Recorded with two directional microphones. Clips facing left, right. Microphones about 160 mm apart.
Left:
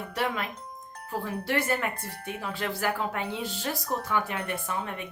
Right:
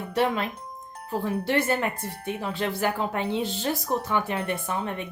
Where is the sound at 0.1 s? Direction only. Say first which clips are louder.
Right 7 dB; 25° right (ahead or behind).